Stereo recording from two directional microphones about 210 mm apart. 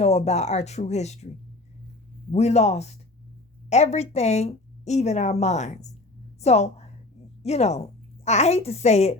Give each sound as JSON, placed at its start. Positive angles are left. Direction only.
{"t": 0.0, "sound": "a woman's voice", "side_deg": 30}
{"t": 2.3, "sound": "a woman's voice", "side_deg": 30}